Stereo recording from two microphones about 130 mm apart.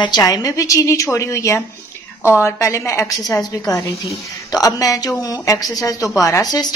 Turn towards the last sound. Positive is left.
turn(degrees=30)  # may be behind; listen again after turning